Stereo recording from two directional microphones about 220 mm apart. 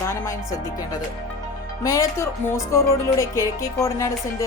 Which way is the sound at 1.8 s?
15° left (ahead or behind).